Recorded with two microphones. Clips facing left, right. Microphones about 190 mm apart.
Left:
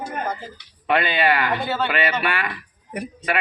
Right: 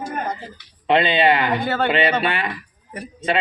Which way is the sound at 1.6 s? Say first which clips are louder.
Right 3 dB; 55° right (ahead or behind).